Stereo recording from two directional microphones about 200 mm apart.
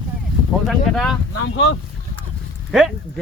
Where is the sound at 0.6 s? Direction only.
Centre (ahead or behind).